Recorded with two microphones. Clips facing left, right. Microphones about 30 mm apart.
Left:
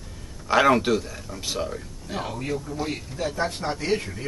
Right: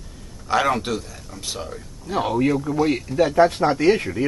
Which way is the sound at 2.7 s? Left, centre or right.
Right.